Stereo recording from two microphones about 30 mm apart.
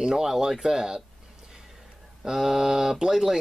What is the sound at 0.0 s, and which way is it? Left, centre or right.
Speech, centre.